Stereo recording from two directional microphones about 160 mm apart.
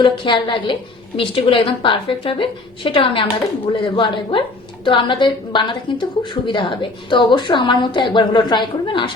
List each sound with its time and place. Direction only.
0.0 s a woman's voice: 30° left (ahead or behind)